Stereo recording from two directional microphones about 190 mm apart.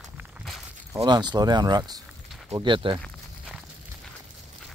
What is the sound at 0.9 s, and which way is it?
Speech, 25° right (ahead or behind).